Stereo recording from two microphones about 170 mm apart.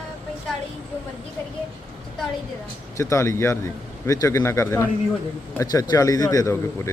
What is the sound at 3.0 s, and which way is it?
A man's voice, 15° left (ahead or behind).